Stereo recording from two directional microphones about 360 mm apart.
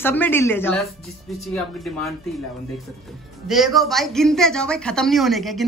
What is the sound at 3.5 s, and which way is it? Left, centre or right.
Speech, centre.